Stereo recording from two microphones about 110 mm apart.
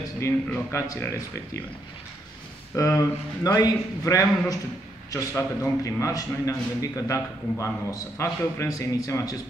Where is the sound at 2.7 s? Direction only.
30° left (ahead or behind).